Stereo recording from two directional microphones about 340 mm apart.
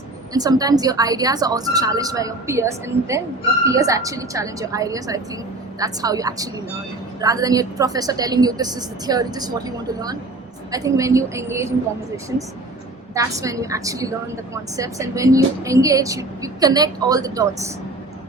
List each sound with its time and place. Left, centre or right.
0.3 s a woman's voice: centre
13.1 s a woman's voice: centre